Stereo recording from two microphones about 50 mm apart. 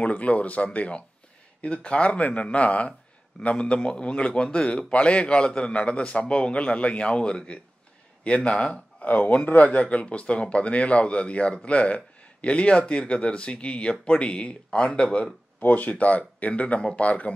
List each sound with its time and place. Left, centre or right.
0.0 s speech: left
15.6 s speech: left